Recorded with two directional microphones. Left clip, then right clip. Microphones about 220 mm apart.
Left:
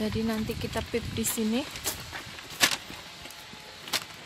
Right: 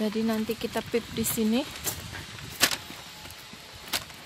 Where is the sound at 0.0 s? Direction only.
20° right (ahead or behind).